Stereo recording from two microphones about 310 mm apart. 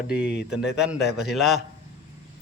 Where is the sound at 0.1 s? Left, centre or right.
Centre.